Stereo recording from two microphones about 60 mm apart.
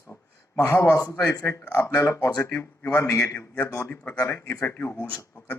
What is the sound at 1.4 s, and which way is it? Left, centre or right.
Speech, left.